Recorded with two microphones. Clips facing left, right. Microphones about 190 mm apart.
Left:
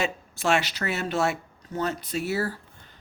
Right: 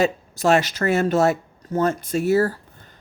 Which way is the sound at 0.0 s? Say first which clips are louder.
Right 7 dB; 40° right (ahead or behind).